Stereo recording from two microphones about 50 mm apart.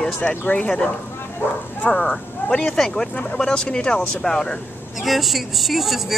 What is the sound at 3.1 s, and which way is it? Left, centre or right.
Speech, left.